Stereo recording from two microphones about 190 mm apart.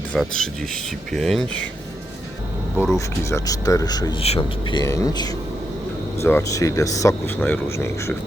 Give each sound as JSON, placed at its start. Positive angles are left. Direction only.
{"t": 0.1, "sound": "speech", "side_deg": 0}
{"t": 2.7, "sound": "speech", "side_deg": 0}
{"t": 3.2, "sound": "speech", "side_deg": 15}